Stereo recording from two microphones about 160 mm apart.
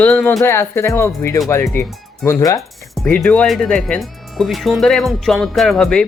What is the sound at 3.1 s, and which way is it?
Speech, 10° left (ahead or behind).